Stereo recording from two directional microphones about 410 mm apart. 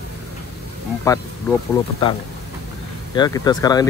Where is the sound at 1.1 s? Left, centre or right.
Centre.